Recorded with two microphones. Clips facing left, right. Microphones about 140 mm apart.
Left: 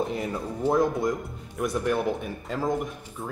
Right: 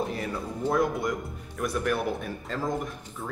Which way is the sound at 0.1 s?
20° left (ahead or behind).